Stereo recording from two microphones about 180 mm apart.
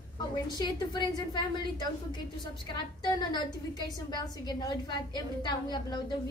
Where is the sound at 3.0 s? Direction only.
25° left (ahead or behind).